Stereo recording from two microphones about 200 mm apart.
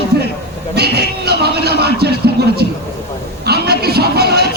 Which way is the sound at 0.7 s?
55° right (ahead or behind).